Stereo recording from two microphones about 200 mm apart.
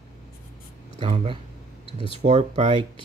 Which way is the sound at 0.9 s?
25° right (ahead or behind).